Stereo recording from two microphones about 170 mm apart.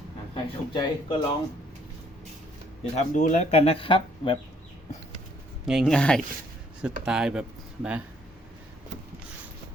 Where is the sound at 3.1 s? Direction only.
45° left (ahead or behind); by 4.3 s 30° left (ahead or behind).